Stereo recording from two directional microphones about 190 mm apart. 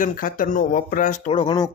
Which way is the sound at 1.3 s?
25° left (ahead or behind).